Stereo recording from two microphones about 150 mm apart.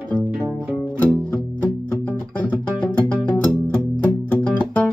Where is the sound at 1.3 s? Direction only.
10° left (ahead or behind).